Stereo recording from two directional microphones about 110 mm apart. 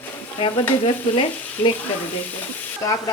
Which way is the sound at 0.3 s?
55° left (ahead or behind).